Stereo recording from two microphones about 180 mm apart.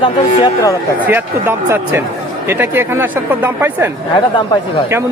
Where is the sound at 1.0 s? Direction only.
10° right (ahead or behind).